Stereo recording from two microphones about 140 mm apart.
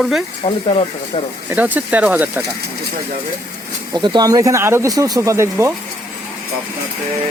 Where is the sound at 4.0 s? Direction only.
30° right (ahead or behind).